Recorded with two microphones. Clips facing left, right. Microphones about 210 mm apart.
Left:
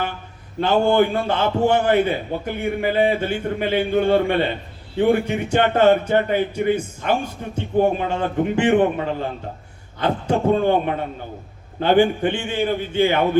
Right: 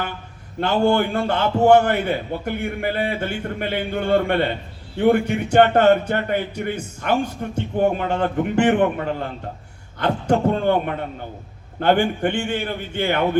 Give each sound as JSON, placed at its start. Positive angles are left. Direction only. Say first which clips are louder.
{"t": 0.9, "sound": "a man's voice", "louder": "left 2 dB", "side_deg": -55}